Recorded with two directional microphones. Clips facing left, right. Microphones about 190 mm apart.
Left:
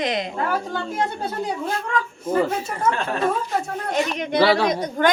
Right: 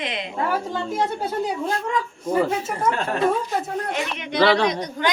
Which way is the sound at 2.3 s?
5° left (ahead or behind).